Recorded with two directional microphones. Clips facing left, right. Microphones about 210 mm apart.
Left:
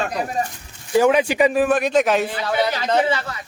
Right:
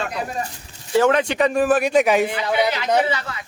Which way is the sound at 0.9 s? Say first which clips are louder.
Left 1 dB; 10° left (ahead or behind).